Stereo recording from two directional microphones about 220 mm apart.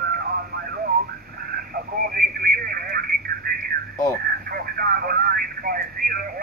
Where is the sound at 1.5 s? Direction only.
40° right (ahead or behind).